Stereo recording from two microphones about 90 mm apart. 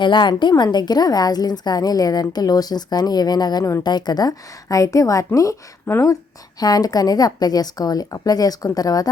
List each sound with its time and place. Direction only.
0.0 s a woman's voice: 60° left (ahead or behind)
3.6 s a woman's voice: 35° left (ahead or behind)
3.8 s a woman's voice: 50° left (ahead or behind)
5.8 s a woman's voice: 25° left (ahead or behind)
6.6 s a woman's voice: 45° left (ahead or behind)